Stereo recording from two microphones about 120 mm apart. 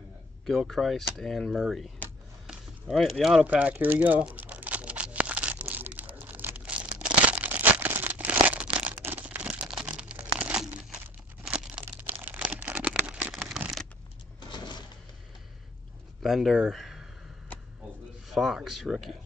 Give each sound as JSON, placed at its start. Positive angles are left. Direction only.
{"t": 0.5, "sound": "speech", "side_deg": 0}
{"t": 2.4, "sound": "a sound", "side_deg": -5}
{"t": 3.4, "sound": "crumpling", "side_deg": -10}
{"t": 11.4, "sound": "a sound", "side_deg": -5}
{"t": 14.5, "sound": "cash register", "side_deg": 40}
{"t": 16.2, "sound": "speech", "side_deg": 0}
{"t": 18.3, "sound": "speech", "side_deg": 0}